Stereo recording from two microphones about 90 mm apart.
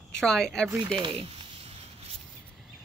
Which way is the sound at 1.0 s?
90° right.